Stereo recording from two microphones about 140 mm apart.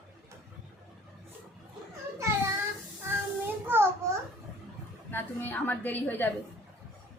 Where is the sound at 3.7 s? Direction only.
15° right (ahead or behind).